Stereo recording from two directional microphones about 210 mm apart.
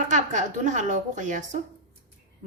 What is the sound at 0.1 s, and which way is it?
Speech, 35° right (ahead or behind).